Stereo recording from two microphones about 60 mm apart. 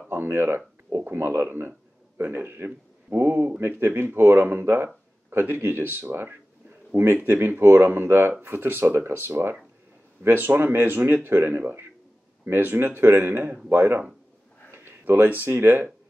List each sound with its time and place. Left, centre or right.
0.1 s speech: right